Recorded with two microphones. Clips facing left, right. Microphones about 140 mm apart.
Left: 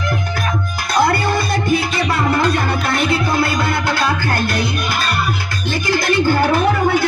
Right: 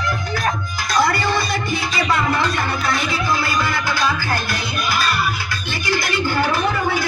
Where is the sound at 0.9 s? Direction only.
60° left (ahead or behind).